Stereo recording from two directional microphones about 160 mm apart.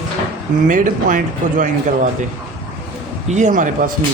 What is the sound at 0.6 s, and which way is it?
Speech, 55° right (ahead or behind).